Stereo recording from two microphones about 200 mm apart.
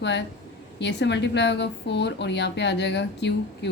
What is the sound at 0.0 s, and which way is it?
A woman's voice, 60° left (ahead or behind).